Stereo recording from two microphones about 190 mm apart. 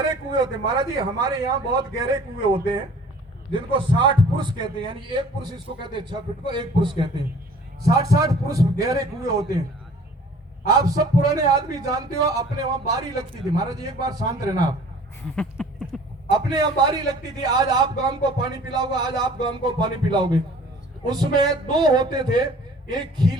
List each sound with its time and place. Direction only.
0.0 s a man's voice: 25° right (ahead or behind)
10.7 s a man's voice: 20° right (ahead or behind)
15.4 s a sound: 5° left (ahead or behind)
16.3 s a man's voice: 20° right (ahead or behind)